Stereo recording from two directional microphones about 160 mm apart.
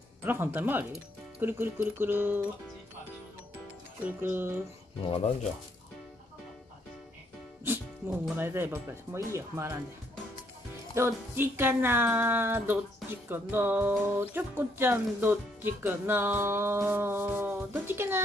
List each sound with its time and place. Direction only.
0.2 s speech: 15° right (ahead or behind)
4.0 s speech: 15° right (ahead or behind)
5.0 s speech: 40° left (ahead or behind)
7.6 s speech: 15° right (ahead or behind)
11.0 s speech: 15° right (ahead or behind)